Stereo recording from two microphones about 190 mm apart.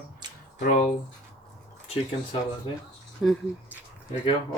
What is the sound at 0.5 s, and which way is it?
Speech, 45° left (ahead or behind).